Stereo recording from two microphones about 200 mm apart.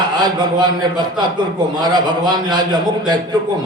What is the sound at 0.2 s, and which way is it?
A man's voice, 20° right (ahead or behind).